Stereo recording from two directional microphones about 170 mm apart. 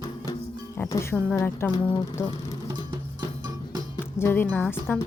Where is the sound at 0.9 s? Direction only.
15° left (ahead or behind).